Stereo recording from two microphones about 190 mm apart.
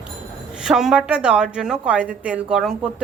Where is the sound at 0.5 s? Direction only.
5° right (ahead or behind).